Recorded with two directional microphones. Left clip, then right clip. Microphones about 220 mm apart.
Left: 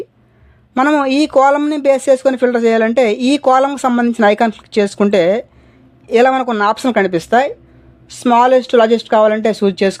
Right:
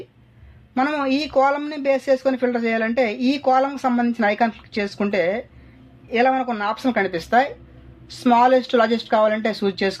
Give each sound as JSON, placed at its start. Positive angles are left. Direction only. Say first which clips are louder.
{"t": 0.7, "sound": "speech", "louder": "left 8 dB", "side_deg": 50}